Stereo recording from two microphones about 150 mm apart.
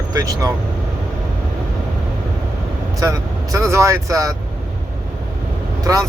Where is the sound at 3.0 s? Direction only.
20° right (ahead or behind).